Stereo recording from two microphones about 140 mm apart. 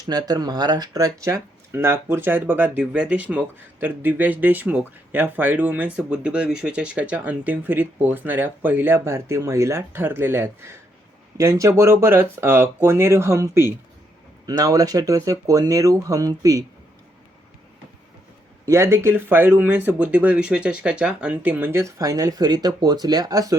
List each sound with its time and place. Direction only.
0.1 s speech: 30° right (ahead or behind)
18.6 s speech: 20° right (ahead or behind)